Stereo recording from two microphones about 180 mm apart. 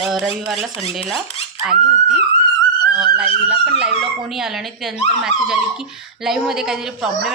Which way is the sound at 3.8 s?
Centre (ahead or behind).